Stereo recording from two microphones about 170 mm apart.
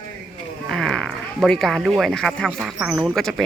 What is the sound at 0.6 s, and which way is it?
Speech, 5° left (ahead or behind).